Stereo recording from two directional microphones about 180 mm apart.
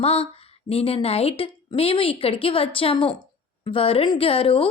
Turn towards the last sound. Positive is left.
turn(degrees=30)  # may be behind; listen again after turning